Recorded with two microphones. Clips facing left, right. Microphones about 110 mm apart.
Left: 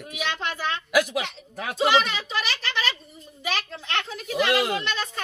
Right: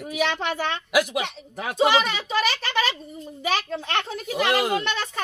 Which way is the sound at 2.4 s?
45° right (ahead or behind).